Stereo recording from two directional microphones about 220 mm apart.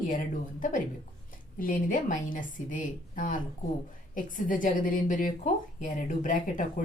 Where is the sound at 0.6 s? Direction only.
35° left (ahead or behind).